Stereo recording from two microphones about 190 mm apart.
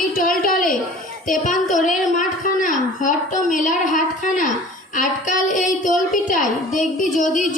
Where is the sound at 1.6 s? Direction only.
40° left (ahead or behind).